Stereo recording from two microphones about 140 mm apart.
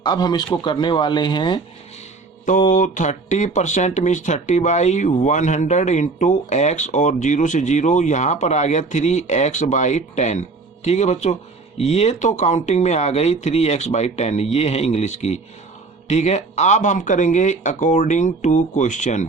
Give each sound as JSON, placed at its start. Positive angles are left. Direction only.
{"t": 0.0, "sound": "speech", "side_deg": 30}
{"t": 2.5, "sound": "speech", "side_deg": 65}